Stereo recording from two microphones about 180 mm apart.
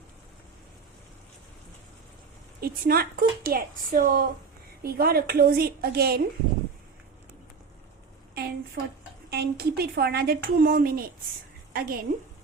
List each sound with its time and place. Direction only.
2.6 s speech: 55° right (ahead or behind)
8.4 s a sound: 60° right (ahead or behind)
9.3 s a woman's voice: 60° right (ahead or behind)